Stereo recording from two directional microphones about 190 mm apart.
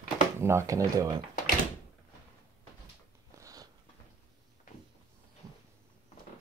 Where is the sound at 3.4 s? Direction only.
20° right (ahead or behind).